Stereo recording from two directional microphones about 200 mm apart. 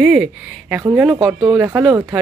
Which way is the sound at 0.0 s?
5° right (ahead or behind).